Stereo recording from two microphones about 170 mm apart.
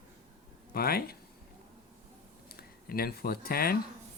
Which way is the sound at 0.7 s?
65° left (ahead or behind).